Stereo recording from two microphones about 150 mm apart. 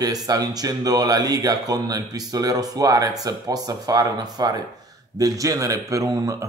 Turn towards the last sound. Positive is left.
turn(degrees=-20)  # may be behind; listen again after turning